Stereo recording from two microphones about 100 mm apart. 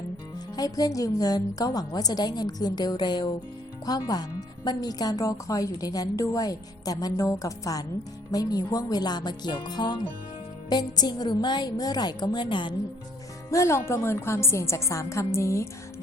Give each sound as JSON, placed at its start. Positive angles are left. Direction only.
{"t": 0.5, "sound": "a woman's voice", "side_deg": 40}
{"t": 13.5, "sound": "a woman's voice", "side_deg": 30}